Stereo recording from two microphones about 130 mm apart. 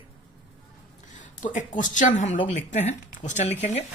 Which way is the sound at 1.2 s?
80° left.